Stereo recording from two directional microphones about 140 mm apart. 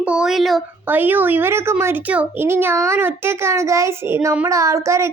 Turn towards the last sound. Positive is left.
turn(degrees=-20)  # may be behind; listen again after turning